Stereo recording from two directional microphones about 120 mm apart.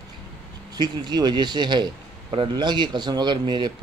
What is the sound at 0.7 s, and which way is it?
Speech, 40° right (ahead or behind).